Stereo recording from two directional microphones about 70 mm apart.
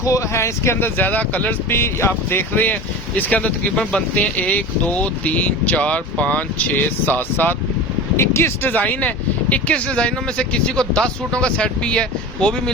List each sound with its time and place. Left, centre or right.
0.0 s speech: left
1.8 s speech: left
3.2 s speech: left
8.1 s speech: left; by 12.7 s centre